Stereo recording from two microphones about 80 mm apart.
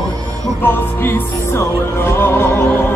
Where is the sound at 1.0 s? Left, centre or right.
Left.